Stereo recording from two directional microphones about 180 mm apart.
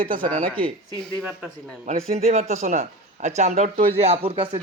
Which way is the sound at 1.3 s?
5° left (ahead or behind).